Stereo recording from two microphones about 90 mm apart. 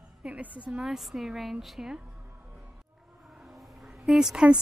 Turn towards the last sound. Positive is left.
turn(degrees=-5)  # may be behind; listen again after turning